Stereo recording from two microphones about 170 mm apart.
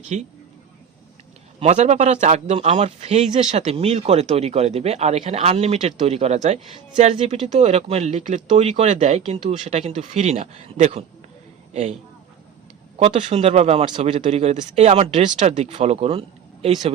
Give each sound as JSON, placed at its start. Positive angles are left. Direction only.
{"t": 0.1, "sound": "speech", "side_deg": -45}
{"t": 1.5, "sound": "speech", "side_deg": -40}
{"t": 13.1, "sound": "speech", "side_deg": -40}